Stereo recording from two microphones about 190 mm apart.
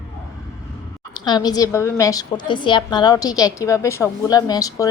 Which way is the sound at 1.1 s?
20° left (ahead or behind).